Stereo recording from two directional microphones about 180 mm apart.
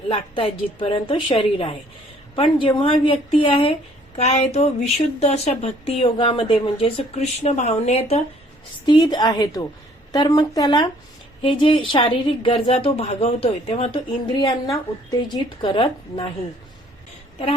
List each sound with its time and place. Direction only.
0.1 s a woman's voice: 30° left (ahead or behind)
8.9 s a woman's voice: 20° left (ahead or behind)